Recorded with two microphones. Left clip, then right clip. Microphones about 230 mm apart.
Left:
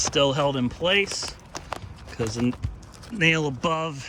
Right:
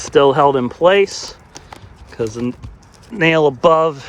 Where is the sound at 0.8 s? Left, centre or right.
Right.